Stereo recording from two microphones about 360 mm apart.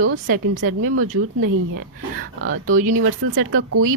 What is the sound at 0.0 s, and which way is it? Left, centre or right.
A woman's voice, right.